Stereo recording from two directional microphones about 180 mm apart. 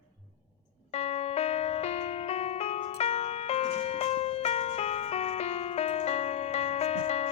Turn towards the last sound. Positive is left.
turn(degrees=35)  # may be behind; listen again after turning